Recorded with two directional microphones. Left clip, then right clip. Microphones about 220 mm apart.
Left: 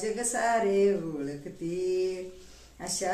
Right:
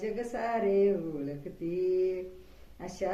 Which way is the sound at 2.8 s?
15° left (ahead or behind).